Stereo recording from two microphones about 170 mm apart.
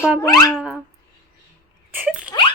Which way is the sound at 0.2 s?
20° left (ahead or behind).